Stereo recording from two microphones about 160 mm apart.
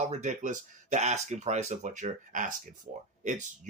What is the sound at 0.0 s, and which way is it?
A man's voice, 50° right (ahead or behind).